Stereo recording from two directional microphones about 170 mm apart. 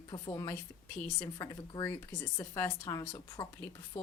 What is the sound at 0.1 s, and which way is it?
A woman's voice, 20° left (ahead or behind).